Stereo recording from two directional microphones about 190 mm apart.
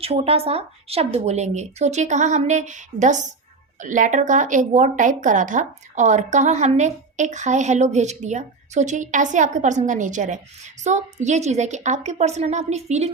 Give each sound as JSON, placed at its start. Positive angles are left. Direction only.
{"t": 0.0, "sound": "a woman's voice", "side_deg": -30}